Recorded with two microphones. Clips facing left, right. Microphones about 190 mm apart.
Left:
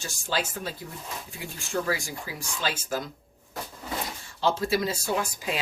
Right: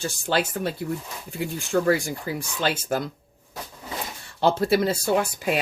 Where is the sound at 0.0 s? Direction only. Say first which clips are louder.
Right 6 dB; 60° right (ahead or behind).